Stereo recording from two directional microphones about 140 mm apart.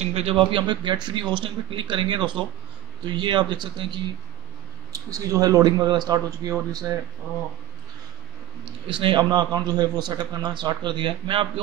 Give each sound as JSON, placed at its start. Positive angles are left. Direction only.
{"t": 0.0, "sound": "a man's voice", "side_deg": -45}
{"t": 4.9, "sound": "speech", "side_deg": -25}
{"t": 8.8, "sound": "a man's voice", "side_deg": -35}